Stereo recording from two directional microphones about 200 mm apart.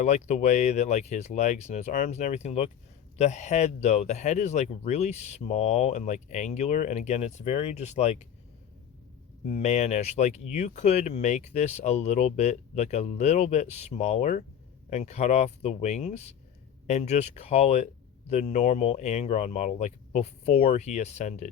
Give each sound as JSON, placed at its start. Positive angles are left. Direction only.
{"t": 0.0, "sound": "speech", "side_deg": 35}
{"t": 9.6, "sound": "speech", "side_deg": 35}